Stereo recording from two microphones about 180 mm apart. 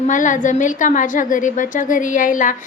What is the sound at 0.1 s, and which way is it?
A woman's voice, 45° left (ahead or behind).